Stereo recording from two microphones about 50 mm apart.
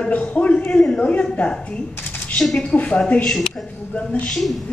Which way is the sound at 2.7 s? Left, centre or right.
Left.